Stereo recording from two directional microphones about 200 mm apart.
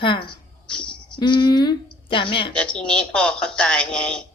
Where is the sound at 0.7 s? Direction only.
5° left (ahead or behind).